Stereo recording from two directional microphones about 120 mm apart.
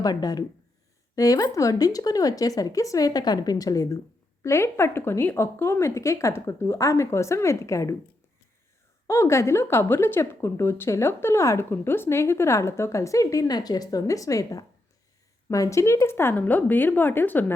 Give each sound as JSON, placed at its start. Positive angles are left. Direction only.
{"t": 0.0, "sound": "a woman's voice", "side_deg": 35}
{"t": 9.0, "sound": "a woman's voice", "side_deg": 25}